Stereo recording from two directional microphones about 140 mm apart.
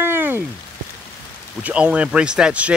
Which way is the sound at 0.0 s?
15° right (ahead or behind).